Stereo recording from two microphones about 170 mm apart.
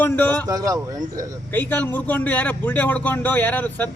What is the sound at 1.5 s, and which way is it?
A man's voice, 10° left (ahead or behind).